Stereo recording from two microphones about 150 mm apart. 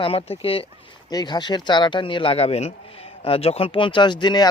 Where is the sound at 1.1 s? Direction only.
30° left (ahead or behind).